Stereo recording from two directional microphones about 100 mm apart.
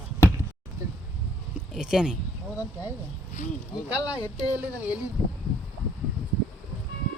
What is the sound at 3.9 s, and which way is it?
Speech, 15° right (ahead or behind).